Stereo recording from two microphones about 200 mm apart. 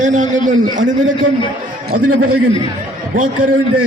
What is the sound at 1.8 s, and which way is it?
A man's voice, 45° right (ahead or behind).